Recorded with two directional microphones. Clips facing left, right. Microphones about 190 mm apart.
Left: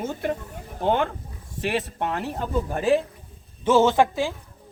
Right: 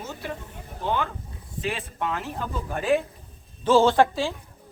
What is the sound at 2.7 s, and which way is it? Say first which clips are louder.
Speech: left 1 dB; 35° left (ahead or behind).